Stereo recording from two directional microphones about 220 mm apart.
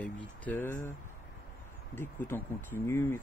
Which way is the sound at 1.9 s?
10° left (ahead or behind).